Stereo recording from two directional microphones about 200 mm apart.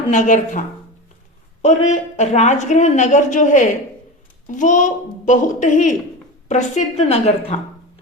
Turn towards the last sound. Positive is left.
turn(degrees=30)  # may be behind; listen again after turning